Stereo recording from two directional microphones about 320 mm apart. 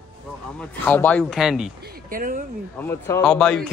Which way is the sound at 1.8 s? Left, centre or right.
Right.